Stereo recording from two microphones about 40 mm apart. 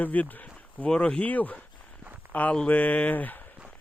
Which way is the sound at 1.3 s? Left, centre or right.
Left.